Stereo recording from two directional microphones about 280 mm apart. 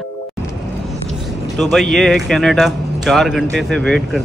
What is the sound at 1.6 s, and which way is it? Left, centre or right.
Speech, centre.